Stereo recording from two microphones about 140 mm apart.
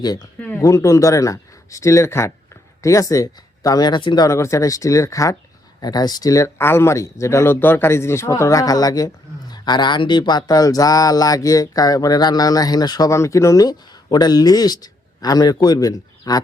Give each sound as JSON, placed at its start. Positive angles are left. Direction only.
{"t": 0.0, "sound": "speech", "side_deg": 30}
{"t": 0.3, "sound": "speech", "side_deg": 10}
{"t": 0.6, "sound": "speech", "side_deg": 20}